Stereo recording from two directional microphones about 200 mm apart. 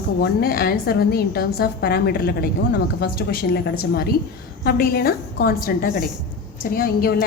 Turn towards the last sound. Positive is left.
turn(degrees=45)  # may be behind; listen again after turning